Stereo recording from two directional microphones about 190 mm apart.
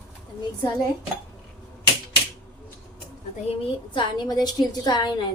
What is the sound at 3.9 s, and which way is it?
A woman's voice, 25° left (ahead or behind).